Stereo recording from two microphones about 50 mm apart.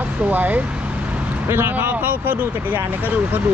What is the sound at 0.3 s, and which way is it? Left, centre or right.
Speech, right.